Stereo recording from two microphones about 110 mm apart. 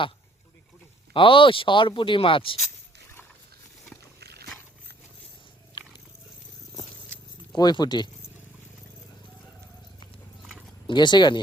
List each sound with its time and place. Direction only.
1.1 s speech: 50° left (ahead or behind)
7.5 s speech: 40° left (ahead or behind)
10.8 s speech: 45° left (ahead or behind)